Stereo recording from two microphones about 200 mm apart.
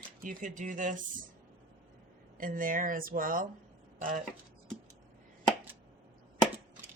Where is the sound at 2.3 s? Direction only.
45° right (ahead or behind).